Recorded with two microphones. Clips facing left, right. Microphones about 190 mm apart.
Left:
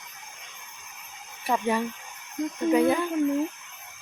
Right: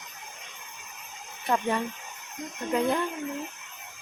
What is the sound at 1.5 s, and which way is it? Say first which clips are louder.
Speech: left 1 dB; 10° left (ahead or behind).